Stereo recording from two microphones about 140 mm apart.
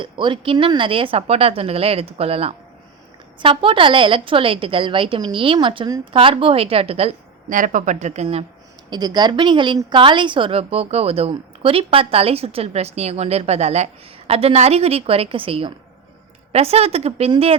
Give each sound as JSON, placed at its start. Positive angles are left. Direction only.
{"t": 0.0, "sound": "a woman's voice", "side_deg": -35}
{"t": 7.5, "sound": "a woman's voice", "side_deg": -70}
{"t": 8.9, "sound": "a woman's voice", "side_deg": -30}